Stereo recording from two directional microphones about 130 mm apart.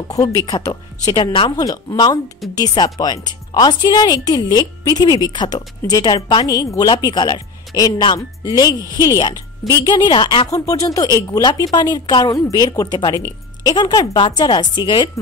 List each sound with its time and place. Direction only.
0.1 s speech: 25° left (ahead or behind)
1.6 s speech: 30° left (ahead or behind)
10.5 s speech: 25° left (ahead or behind)